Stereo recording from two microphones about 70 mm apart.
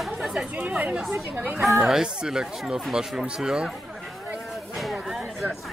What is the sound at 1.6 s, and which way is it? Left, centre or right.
Speech, centre.